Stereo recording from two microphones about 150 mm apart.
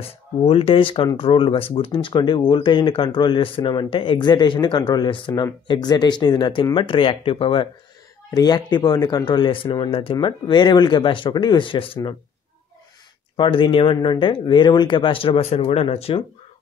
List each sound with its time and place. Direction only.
0.0 s speech: 40° left (ahead or behind)
8.3 s speech: 25° left (ahead or behind)
13.4 s speech: 35° left (ahead or behind)